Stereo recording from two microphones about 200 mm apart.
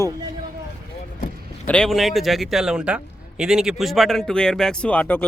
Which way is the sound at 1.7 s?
5° left (ahead or behind).